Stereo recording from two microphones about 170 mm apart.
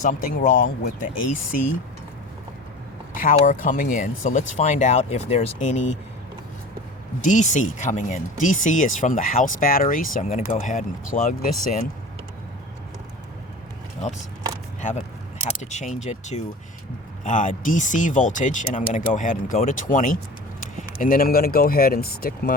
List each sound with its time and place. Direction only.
0.0 s speech: 50° left (ahead or behind)
3.2 s speech: 50° left (ahead or behind)
7.2 s speech: 45° left (ahead or behind)
14.8 s single-lens reflex camera: 45° left (ahead or behind)
15.7 s speech: 45° left (ahead or behind)